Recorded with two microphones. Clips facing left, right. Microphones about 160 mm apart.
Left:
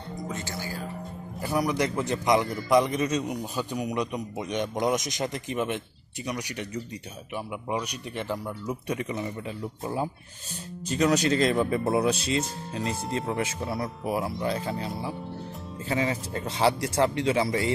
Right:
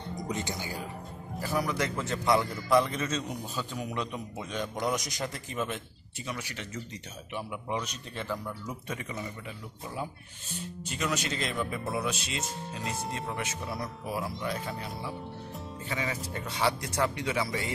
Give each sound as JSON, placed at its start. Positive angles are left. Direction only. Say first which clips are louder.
{"t": 0.1, "sound": "music", "louder": "even", "side_deg": -20}
{"t": 1.4, "sound": "a man's voice", "louder": "left 4 dB", "side_deg": 15}
{"t": 10.9, "sound": "speech", "louder": "left 10 dB", "side_deg": 35}
{"t": 15.9, "sound": "speech", "louder": "left 7 dB", "side_deg": 30}